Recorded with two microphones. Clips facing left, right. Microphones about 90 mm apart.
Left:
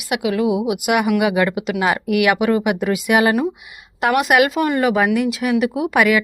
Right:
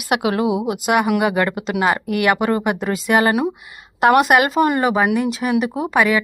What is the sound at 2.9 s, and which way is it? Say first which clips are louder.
Speech: even; 10° left (ahead or behind).